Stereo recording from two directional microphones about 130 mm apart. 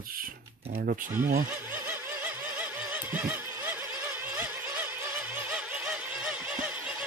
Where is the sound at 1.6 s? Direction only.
15° right (ahead or behind).